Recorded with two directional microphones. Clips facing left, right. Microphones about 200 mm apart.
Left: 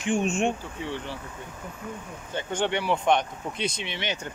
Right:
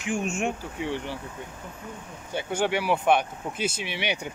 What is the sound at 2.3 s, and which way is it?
Speech, 10° right (ahead or behind).